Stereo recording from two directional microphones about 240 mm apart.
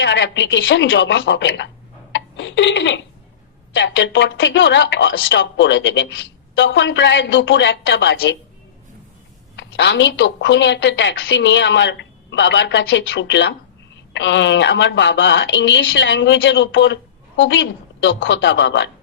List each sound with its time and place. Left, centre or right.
0.0 s speech: left
9.6 s speech: left